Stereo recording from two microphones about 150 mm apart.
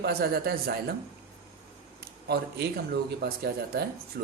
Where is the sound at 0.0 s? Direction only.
90° right.